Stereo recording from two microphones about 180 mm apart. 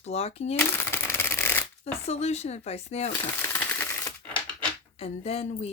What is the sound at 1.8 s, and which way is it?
Speech, 35° left (ahead or behind).